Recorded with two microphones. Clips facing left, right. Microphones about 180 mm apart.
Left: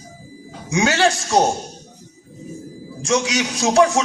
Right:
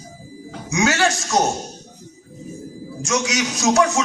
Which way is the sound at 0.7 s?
30° left (ahead or behind).